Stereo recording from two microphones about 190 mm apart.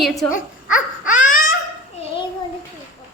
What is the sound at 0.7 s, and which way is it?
Baby cry, 45° left (ahead or behind).